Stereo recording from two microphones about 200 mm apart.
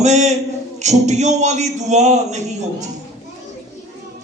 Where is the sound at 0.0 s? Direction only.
35° right (ahead or behind).